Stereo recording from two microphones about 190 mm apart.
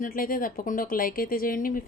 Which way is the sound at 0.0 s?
50° left (ahead or behind).